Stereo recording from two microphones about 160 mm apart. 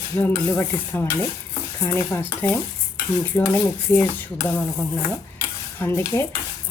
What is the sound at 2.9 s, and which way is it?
Dishes, 25° left (ahead or behind).